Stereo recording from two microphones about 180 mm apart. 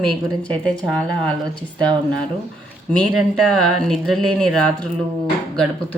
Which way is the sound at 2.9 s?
Centre (ahead or behind).